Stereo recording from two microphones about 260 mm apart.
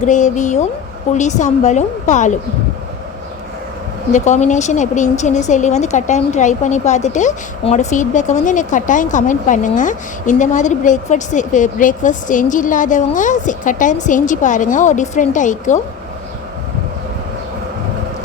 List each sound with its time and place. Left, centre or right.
0.0 s a woman's voice: left
4.1 s a woman's voice: left